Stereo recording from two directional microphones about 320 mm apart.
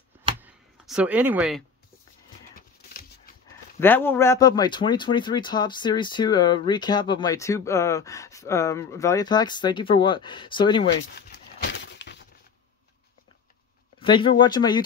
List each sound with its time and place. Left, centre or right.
0.4 s a sound: centre
3.8 s speech: centre
11.1 s horse: left
13.9 s speech: centre